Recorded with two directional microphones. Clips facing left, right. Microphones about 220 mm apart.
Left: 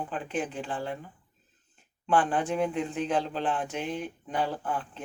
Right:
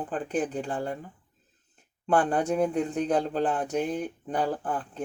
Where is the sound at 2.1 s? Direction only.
40° right (ahead or behind).